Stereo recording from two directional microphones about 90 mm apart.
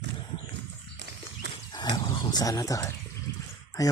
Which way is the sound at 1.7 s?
55° left (ahead or behind).